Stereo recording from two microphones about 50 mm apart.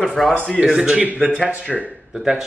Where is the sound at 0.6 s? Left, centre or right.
Centre.